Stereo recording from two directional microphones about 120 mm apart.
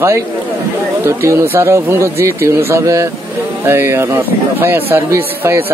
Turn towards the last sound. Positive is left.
turn(degrees=-20)  # may be behind; listen again after turning